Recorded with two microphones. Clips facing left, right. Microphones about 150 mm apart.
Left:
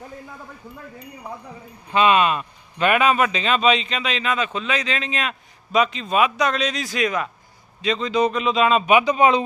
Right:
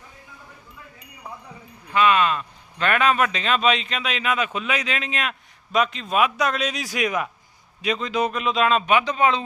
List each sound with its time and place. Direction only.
1.9 s speech: 20° left (ahead or behind); by 8.8 s centre (ahead or behind)
8.9 s speech: 15° left (ahead or behind)